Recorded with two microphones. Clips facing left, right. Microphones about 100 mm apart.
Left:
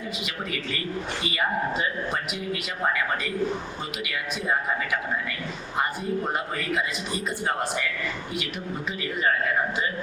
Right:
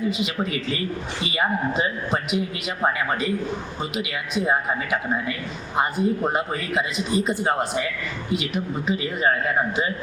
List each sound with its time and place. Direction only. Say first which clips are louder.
0.1 s a man's voice: right 7 dB; 20° right (ahead or behind)